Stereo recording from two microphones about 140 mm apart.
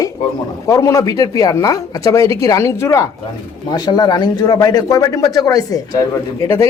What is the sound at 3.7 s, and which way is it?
Speech, 30° left (ahead or behind).